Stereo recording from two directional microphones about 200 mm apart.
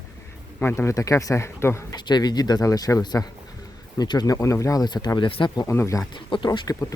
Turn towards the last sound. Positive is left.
turn(degrees=20)  # may be behind; listen again after turning